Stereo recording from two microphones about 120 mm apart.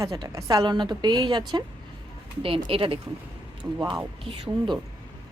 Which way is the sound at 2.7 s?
50° right (ahead or behind).